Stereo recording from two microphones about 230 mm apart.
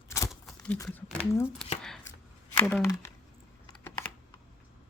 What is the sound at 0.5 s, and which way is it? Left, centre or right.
Speech, centre.